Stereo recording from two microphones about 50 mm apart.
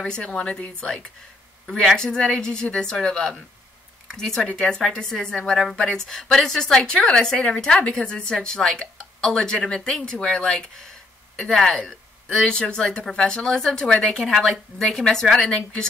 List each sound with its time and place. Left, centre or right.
0.1 s a woman's voice: centre
14.2 s a woman's voice: centre